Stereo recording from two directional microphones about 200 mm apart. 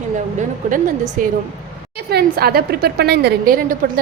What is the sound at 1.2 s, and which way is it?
Speech, 40° right (ahead or behind).